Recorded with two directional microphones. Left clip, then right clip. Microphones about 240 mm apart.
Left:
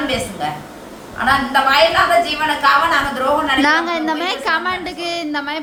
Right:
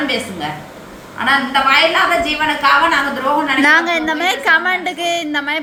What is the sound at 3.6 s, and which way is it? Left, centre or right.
A woman's voice, centre.